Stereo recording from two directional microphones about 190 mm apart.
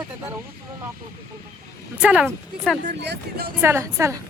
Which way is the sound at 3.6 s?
15° right (ahead or behind).